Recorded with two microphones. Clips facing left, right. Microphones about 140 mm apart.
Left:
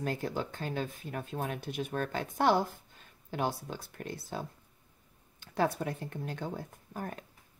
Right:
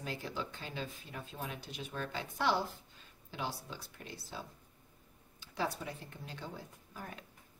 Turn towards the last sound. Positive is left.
turn(degrees=50)  # may be behind; listen again after turning